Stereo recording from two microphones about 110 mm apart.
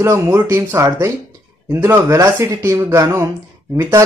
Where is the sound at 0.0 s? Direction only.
25° right (ahead or behind).